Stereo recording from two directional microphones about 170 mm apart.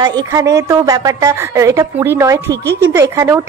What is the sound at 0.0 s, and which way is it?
A woman's voice, 20° right (ahead or behind).